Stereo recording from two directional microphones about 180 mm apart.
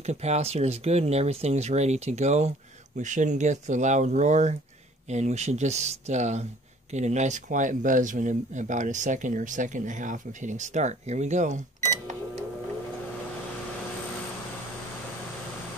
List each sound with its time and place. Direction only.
0.0 s speech: 40° right (ahead or behind)